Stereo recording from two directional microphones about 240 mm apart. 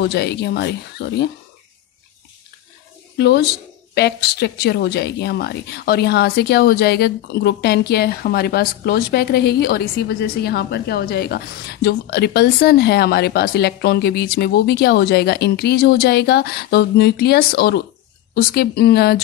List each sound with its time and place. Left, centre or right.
0.0 s speech: left
3.2 s speech: left